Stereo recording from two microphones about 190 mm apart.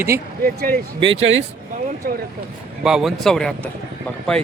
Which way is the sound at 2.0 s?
50° right (ahead or behind).